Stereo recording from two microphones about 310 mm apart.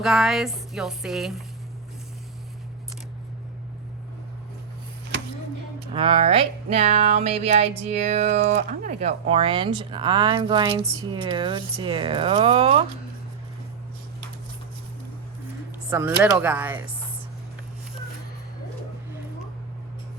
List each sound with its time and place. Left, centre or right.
0.0 s speech: centre
5.9 s speech: centre
15.9 s speech: centre